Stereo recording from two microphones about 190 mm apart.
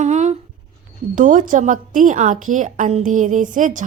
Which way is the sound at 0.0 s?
40° right (ahead or behind).